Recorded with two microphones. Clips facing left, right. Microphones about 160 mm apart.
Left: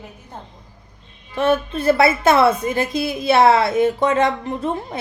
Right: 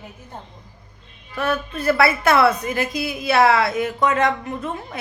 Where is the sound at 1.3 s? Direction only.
25° left (ahead or behind).